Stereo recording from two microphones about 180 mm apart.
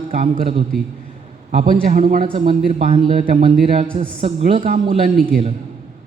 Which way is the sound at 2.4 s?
35° right (ahead or behind).